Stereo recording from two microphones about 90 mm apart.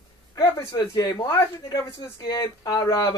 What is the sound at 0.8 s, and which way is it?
Speech, 50° left (ahead or behind).